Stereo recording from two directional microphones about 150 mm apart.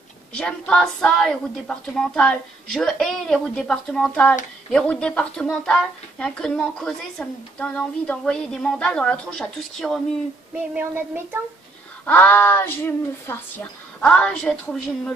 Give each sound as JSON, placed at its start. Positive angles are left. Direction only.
{"t": 0.3, "sound": "speech", "side_deg": 5}
{"t": 10.7, "sound": "a sound", "side_deg": -15}
{"t": 12.1, "sound": "speech", "side_deg": 10}